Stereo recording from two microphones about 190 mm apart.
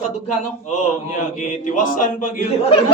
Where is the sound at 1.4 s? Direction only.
45° left (ahead or behind).